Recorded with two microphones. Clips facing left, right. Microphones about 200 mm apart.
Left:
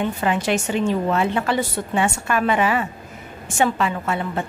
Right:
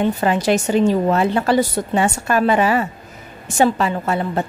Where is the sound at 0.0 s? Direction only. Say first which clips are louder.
Right 4 dB; 40° right (ahead or behind).